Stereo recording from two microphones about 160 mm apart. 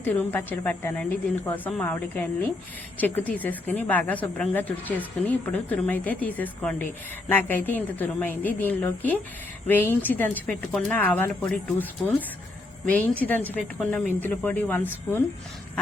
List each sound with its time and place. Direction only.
0.0 s a woman's voice: 10° left (ahead or behind)
13.1 s a woman's voice: 10° left (ahead or behind)